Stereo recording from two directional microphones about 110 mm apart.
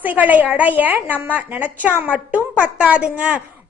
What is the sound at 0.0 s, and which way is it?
A woman's voice, 15° right (ahead or behind).